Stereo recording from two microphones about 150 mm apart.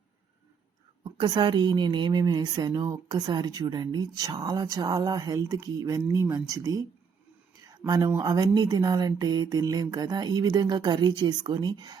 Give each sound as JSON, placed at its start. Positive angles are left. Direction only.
{"t": 1.0, "sound": "a woman's voice", "side_deg": -30}